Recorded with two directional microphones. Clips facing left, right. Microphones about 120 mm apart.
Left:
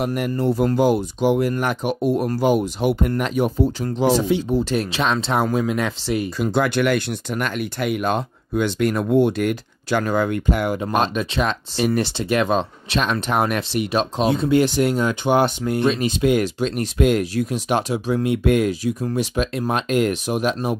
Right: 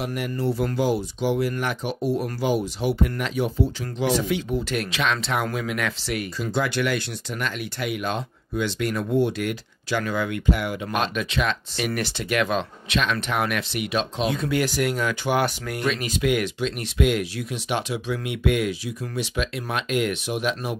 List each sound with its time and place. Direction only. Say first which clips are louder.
0.0 s speech: left 5 dB; 50° left (ahead or behind); by 6.2 s 25° left (ahead or behind)
6.4 s speech: left 5 dB; 55° left (ahead or behind); by 14.4 s 40° left (ahead or behind)
14.4 s speech: left 8 dB; 25° left (ahead or behind)